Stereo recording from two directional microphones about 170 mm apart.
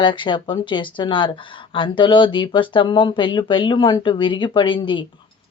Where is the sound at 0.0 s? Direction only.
30° left (ahead or behind).